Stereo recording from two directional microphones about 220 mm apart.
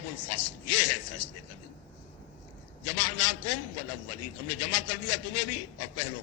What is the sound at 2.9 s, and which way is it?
A man's voice, 90° left.